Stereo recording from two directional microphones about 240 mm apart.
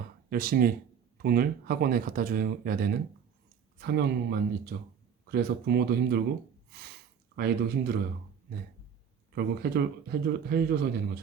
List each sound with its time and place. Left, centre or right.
0.3 s speech: right
9.3 s speech: right